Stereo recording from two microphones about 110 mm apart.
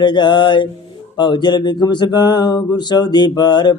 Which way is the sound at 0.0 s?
45° left (ahead or behind).